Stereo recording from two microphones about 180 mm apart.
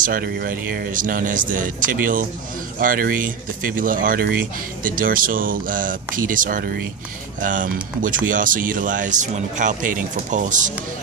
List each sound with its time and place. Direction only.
0.0 s speech: 55° right (ahead or behind)